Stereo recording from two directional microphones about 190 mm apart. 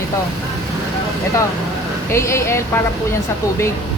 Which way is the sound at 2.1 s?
15° left (ahead or behind).